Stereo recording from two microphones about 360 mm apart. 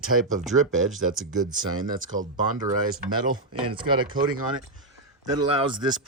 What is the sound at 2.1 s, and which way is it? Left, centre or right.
Speech, right.